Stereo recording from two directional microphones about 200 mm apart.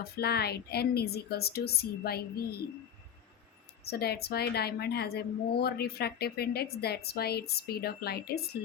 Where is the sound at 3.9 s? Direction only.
50° left (ahead or behind).